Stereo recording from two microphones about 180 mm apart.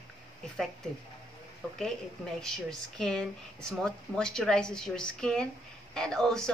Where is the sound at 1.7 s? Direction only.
5° left (ahead or behind).